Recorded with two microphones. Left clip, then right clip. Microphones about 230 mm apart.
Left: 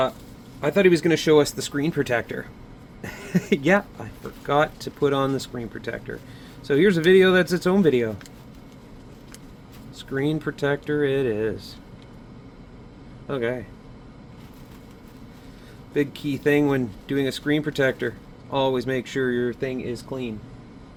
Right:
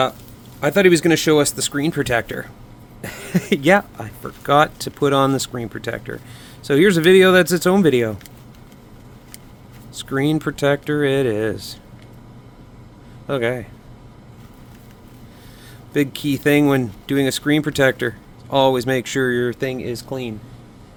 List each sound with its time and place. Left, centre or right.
0.6 s speech: right
9.9 s speech: right
13.2 s speech: right
15.9 s speech: right